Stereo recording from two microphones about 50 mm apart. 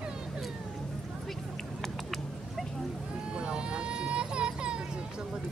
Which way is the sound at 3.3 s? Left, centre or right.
Centre.